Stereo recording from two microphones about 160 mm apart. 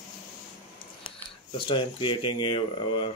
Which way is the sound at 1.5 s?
30° left (ahead or behind).